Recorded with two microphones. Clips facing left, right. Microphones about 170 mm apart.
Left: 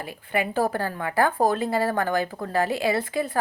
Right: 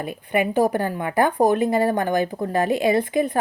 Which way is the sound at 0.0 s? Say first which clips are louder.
Right 5 dB; 20° right (ahead or behind).